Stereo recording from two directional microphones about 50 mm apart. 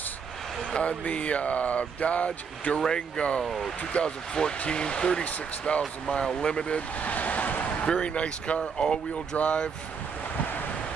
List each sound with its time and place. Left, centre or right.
0.7 s speech: left
3.4 s speech: centre
3.9 s speech: centre
7.0 s vehicle: left
7.8 s speech: left